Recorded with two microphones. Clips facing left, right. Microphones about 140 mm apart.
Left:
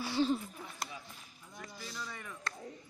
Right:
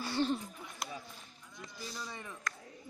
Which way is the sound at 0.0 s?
5° left (ahead or behind).